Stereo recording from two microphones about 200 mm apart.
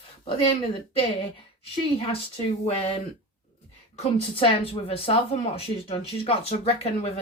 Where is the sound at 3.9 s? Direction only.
30° left (ahead or behind).